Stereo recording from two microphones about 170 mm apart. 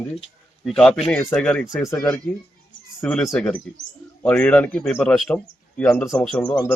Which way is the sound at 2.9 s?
5° left (ahead or behind).